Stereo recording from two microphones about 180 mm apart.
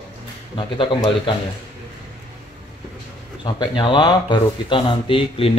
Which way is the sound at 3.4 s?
25° left (ahead or behind).